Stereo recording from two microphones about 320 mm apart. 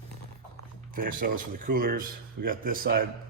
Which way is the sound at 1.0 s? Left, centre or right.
Right.